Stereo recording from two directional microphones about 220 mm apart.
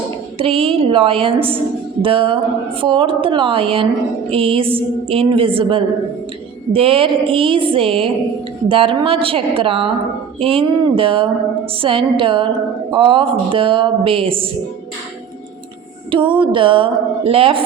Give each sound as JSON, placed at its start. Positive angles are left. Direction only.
{"t": 0.3, "sound": "a woman's voice", "side_deg": -25}
{"t": 16.1, "sound": "a woman's voice", "side_deg": -20}